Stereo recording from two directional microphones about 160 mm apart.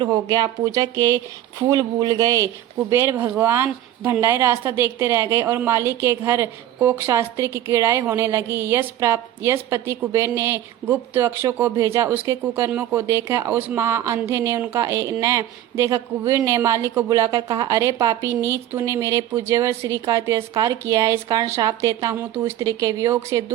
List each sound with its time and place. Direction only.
0.0 s a woman's voice: 25° right (ahead or behind)